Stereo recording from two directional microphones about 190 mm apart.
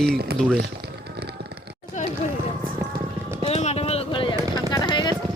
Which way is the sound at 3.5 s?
35° left (ahead or behind).